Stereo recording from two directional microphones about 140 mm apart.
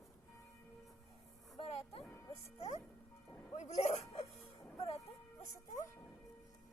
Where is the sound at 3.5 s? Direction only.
55° left (ahead or behind).